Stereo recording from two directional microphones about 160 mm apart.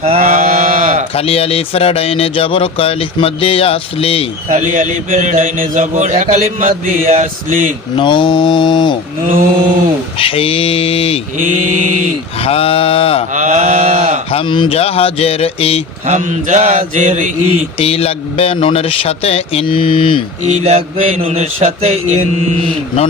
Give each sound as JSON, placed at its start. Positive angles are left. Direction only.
{"t": 0.0, "sound": "sheep", "side_deg": -40}
{"t": 1.1, "sound": "speech", "side_deg": 40}
{"t": 4.5, "sound": "speech", "side_deg": -55}
{"t": 7.1, "sound": "mantra", "side_deg": -50}
{"t": 7.9, "sound": "mantra", "side_deg": 30}
{"t": 9.2, "sound": "speech", "side_deg": -55}
{"t": 10.2, "sound": "speech", "side_deg": 35}
{"t": 11.3, "sound": "mantra", "side_deg": -55}
{"t": 12.4, "sound": "speech", "side_deg": 35}
{"t": 13.3, "sound": "a sound", "side_deg": -50}
{"t": 14.3, "sound": "speech", "side_deg": 35}
{"t": 16.0, "sound": "mantra", "side_deg": -50}
{"t": 17.7, "sound": "speech", "side_deg": 40}
{"t": 20.4, "sound": "speech", "side_deg": -45}